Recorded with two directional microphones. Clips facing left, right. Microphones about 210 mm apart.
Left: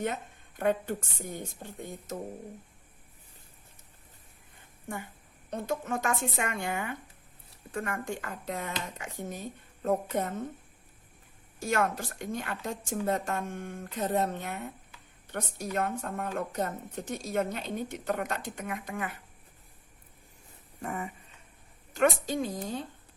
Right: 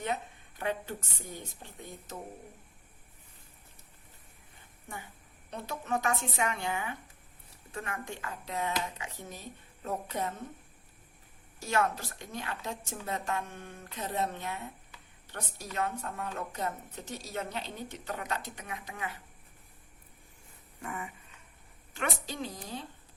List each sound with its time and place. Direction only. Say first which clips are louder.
0.6 s a woman's voice: left 6 dB; 50° left (ahead or behind)
5.5 s a woman's voice: left 3 dB; 50° left (ahead or behind)
11.7 s a woman's voice: left 1 dB; 50° left (ahead or behind)
20.8 s a sound: left 4 dB; 40° left (ahead or behind)
21.9 s a woman's voice: left 9 dB; 50° left (ahead or behind)